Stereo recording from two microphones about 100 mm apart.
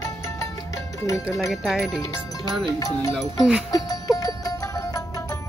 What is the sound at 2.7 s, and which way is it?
Speech, 35° left (ahead or behind).